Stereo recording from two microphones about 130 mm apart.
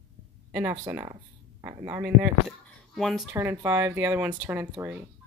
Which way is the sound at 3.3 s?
20° right (ahead or behind).